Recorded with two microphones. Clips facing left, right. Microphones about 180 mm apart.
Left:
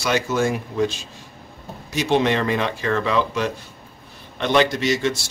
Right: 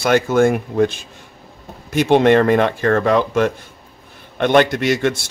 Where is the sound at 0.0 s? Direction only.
55° right (ahead or behind).